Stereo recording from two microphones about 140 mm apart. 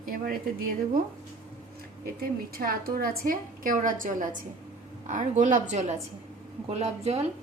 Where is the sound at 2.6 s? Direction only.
90° right; by 4.3 s 75° right (ahead or behind).